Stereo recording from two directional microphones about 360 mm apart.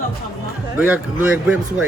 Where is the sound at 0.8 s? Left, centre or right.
Centre.